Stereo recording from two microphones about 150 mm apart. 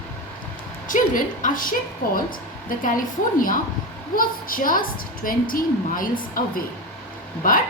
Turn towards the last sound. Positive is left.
turn(degrees=65)  # may be behind; listen again after turning